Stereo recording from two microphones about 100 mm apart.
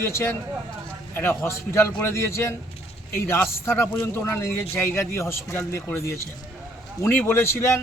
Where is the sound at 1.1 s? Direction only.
25° left (ahead or behind).